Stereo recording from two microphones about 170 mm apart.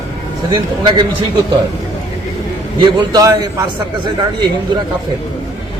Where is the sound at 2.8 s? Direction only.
25° right (ahead or behind).